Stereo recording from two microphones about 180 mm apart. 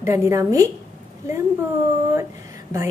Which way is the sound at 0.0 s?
15° right (ahead or behind).